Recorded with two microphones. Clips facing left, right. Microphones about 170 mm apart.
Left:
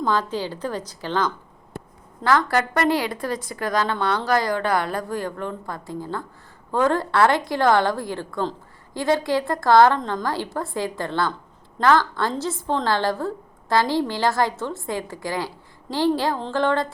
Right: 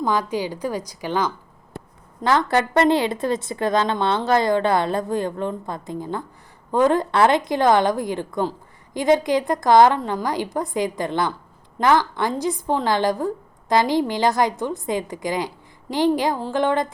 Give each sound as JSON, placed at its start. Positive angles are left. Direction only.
{"t": 0.0, "sound": "a woman's voice", "side_deg": -15}
{"t": 2.2, "sound": "a woman's voice", "side_deg": -20}